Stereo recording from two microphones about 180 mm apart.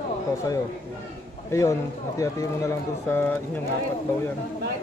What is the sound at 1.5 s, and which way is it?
Speech, 15° left (ahead or behind).